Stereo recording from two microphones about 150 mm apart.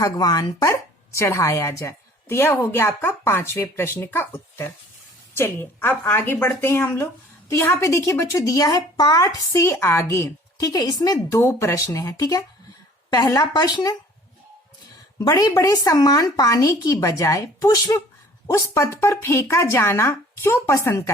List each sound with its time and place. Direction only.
0.0 s a woman's voice: 25° left (ahead or behind)
15.2 s a woman's voice: 25° left (ahead or behind)